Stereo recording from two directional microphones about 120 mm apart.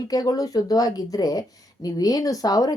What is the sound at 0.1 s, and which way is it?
Speech, 30° left (ahead or behind).